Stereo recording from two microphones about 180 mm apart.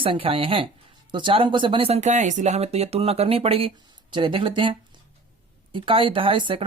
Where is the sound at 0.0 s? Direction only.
30° right (ahead or behind).